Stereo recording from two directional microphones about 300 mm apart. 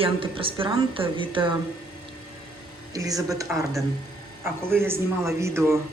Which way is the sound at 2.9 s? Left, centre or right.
Centre.